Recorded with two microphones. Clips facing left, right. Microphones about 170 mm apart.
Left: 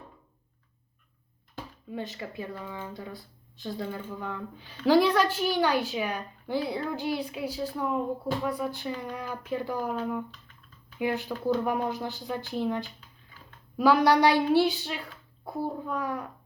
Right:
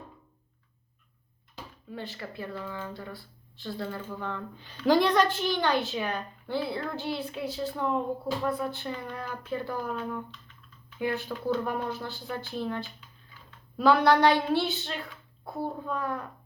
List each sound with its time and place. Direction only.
1.9 s a woman's voice: 20° left (ahead or behind)